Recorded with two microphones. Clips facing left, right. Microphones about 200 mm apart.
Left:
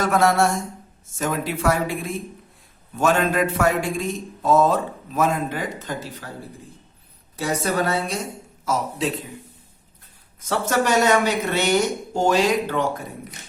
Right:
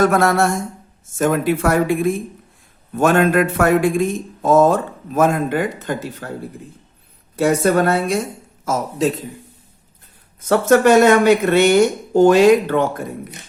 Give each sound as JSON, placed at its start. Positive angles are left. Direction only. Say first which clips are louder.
{"t": 0.0, "sound": "speech", "louder": "right 4 dB", "side_deg": -50}
{"t": 7.3, "sound": "speech", "louder": "right 8 dB", "side_deg": -55}
{"t": 8.6, "sound": "speech", "louder": "right 5 dB", "side_deg": -45}
{"t": 10.5, "sound": "speech", "louder": "right 9 dB", "side_deg": -55}